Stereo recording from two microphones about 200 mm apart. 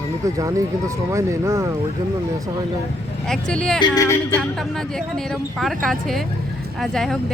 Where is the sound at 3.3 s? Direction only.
5° left (ahead or behind).